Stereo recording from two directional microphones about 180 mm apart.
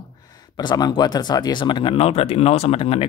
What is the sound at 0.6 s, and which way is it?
Speech, 25° left (ahead or behind).